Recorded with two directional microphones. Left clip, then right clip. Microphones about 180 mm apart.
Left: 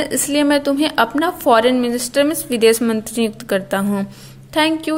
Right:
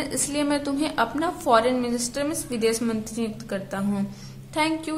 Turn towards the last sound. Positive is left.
turn(degrees=35)  # may be behind; listen again after turning